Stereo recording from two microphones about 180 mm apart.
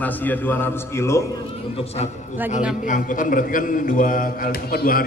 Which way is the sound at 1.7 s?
35° left (ahead or behind).